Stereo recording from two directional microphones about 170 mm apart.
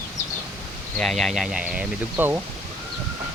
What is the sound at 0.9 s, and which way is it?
Speech, centre (ahead or behind).